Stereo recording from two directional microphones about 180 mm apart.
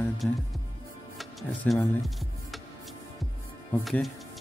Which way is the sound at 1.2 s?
Centre (ahead or behind).